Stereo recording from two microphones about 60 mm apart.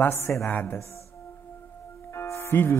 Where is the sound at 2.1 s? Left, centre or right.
Left.